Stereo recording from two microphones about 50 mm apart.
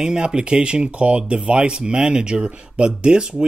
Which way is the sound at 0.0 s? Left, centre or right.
Centre.